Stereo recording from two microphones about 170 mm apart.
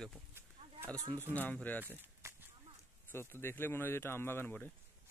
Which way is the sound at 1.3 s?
10° left (ahead or behind).